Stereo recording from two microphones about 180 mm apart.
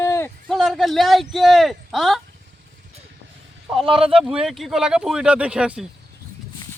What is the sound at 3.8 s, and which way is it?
Speech, 30° right (ahead or behind).